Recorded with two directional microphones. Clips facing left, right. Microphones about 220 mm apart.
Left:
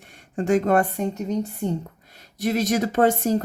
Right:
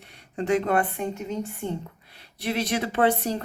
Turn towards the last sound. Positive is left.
turn(degrees=45)  # may be behind; listen again after turning